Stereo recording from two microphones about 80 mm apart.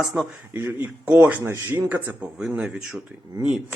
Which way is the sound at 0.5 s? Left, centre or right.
Right.